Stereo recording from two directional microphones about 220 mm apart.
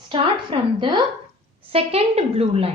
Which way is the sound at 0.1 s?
25° right (ahead or behind).